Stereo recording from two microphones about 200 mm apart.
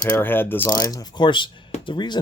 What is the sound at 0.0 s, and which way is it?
Speech, 10° left (ahead or behind).